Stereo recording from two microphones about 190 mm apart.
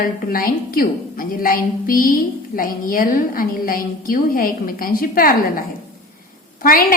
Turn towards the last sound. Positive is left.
turn(degrees=50)  # may be behind; listen again after turning